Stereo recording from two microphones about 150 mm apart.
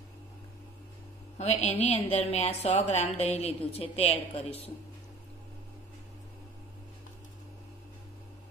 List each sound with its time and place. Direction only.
1.4 s a woman's voice: 45° left (ahead or behind)